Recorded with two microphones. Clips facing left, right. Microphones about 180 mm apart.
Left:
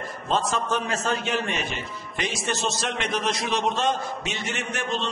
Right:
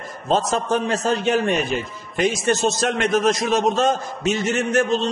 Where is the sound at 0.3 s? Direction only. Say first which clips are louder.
Right 5 dB; 40° right (ahead or behind).